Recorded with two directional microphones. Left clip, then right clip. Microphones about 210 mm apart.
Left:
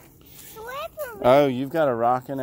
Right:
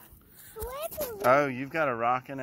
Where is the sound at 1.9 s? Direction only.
25° left (ahead or behind).